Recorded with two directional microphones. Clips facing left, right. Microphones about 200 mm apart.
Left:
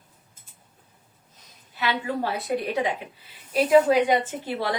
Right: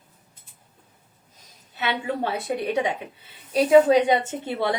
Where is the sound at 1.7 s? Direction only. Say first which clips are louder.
Even; 25° right (ahead or behind).